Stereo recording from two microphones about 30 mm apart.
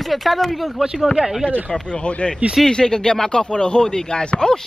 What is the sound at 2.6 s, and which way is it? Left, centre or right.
Speech, left.